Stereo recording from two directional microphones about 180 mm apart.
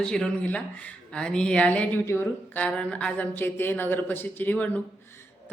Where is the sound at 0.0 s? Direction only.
5° left (ahead or behind).